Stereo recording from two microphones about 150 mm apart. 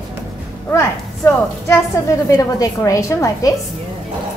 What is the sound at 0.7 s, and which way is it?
A woman's voice, 15° left (ahead or behind).